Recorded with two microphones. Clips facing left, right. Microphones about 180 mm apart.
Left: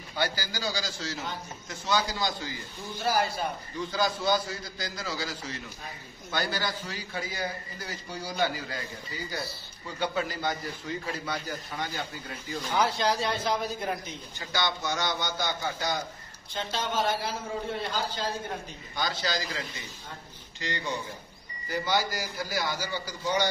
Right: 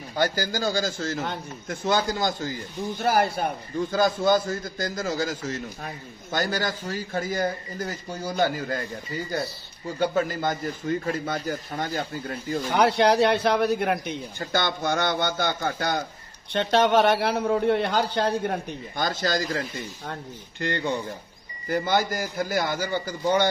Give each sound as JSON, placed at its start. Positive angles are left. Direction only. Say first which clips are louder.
{"t": 0.1, "sound": "speech", "louder": "right 6 dB", "side_deg": -50}
{"t": 12.7, "sound": "speech", "louder": "right 7 dB", "side_deg": -65}
{"t": 14.4, "sound": "a man's voice", "louder": "right 5 dB", "side_deg": -50}
{"t": 16.5, "sound": "a man's voice", "louder": "right 11 dB", "side_deg": -70}
{"t": 20.6, "sound": "a man's voice", "louder": "right 7 dB", "side_deg": -55}